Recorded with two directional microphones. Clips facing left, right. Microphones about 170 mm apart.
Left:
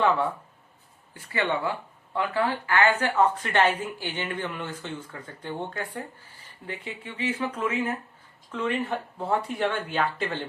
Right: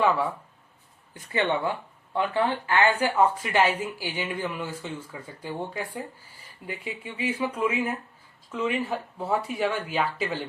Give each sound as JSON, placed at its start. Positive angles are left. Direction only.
{"t": 1.1, "sound": "speech", "side_deg": -20}